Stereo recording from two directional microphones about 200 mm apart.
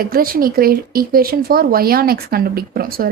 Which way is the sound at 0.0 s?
45° right (ahead or behind).